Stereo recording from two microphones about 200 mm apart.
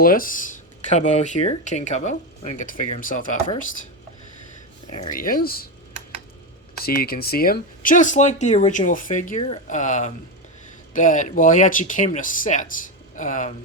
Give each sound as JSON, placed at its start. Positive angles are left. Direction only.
{"t": 0.0, "sound": "speech", "side_deg": 45}
{"t": 5.1, "sound": "speech", "side_deg": 45}
{"t": 6.7, "sound": "speech", "side_deg": 50}